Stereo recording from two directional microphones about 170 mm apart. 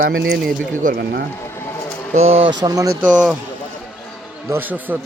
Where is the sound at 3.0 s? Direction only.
5° right (ahead or behind).